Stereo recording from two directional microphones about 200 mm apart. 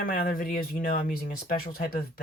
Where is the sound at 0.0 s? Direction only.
45° left (ahead or behind).